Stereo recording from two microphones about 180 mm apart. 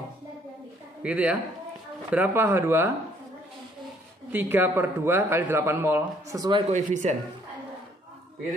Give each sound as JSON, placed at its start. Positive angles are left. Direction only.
{"t": 1.0, "sound": "a man's voice", "side_deg": -10}
{"t": 4.3, "sound": "a man's voice", "side_deg": -10}
{"t": 6.7, "sound": "speech", "side_deg": -40}